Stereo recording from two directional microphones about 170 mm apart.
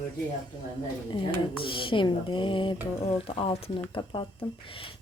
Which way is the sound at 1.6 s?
30° left (ahead or behind).